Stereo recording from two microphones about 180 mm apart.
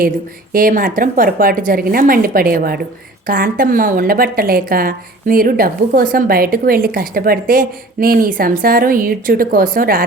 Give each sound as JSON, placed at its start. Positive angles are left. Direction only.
{"t": 0.5, "sound": "a woman's voice", "side_deg": -50}